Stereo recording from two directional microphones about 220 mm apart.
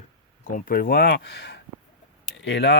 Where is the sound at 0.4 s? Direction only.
40° left (ahead or behind).